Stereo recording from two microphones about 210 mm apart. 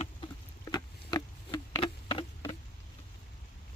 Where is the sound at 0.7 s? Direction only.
20° left (ahead or behind).